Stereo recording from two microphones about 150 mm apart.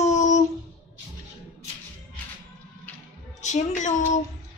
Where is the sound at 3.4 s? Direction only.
50° left (ahead or behind).